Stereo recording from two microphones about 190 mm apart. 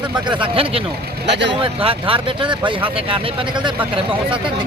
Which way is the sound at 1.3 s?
65° right (ahead or behind).